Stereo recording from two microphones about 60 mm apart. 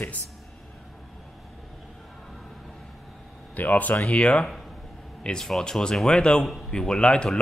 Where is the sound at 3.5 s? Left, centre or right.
Left.